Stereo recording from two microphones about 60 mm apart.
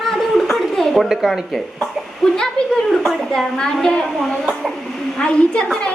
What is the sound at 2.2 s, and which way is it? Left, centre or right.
Speech, centre.